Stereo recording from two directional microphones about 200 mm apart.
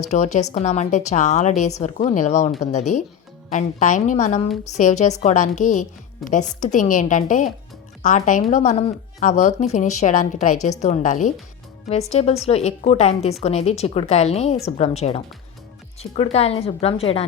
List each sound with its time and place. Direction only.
0.1 s a woman's voice: 35° left (ahead or behind)